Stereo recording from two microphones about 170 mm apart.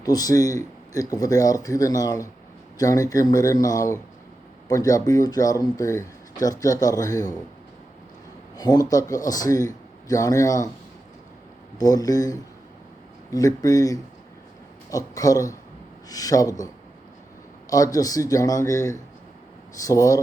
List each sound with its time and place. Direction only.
0.0 s speech: 20° left (ahead or behind)
8.5 s speech: 25° left (ahead or behind)
11.8 s speech: 20° left (ahead or behind)
17.7 s speech: 20° left (ahead or behind)